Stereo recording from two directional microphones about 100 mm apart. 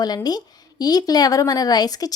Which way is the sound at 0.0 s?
40° left (ahead or behind).